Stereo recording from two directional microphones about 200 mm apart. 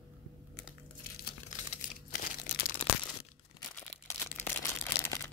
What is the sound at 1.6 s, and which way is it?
Crumpling, 40° left (ahead or behind).